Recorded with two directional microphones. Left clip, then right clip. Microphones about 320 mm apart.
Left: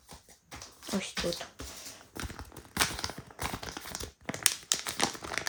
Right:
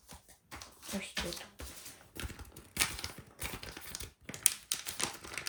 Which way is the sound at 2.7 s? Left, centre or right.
Centre.